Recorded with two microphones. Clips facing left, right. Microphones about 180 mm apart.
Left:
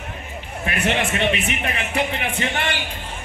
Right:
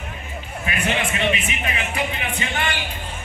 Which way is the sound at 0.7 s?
65° left (ahead or behind).